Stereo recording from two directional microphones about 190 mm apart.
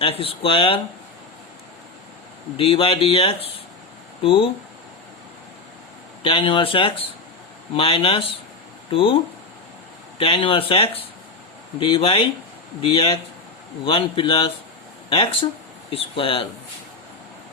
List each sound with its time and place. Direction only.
0.0 s speech: 30° left (ahead or behind)
2.6 s speech: 30° left (ahead or behind)
6.2 s speech: 25° left (ahead or behind)
10.2 s speech: 25° left (ahead or behind)